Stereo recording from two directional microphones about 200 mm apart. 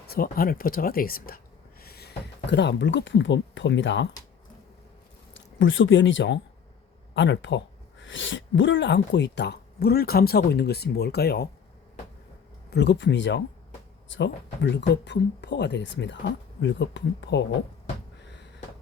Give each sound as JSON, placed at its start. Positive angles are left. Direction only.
{"t": 0.1, "sound": "speech", "side_deg": 45}
{"t": 5.3, "sound": "speech", "side_deg": 70}
{"t": 12.7, "sound": "speech", "side_deg": 55}